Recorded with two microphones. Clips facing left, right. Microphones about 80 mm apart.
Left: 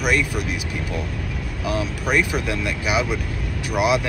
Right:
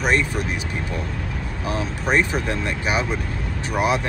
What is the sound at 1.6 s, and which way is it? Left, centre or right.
Speech, right.